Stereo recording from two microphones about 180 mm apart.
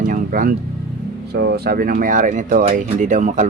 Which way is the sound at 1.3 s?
65° right (ahead or behind).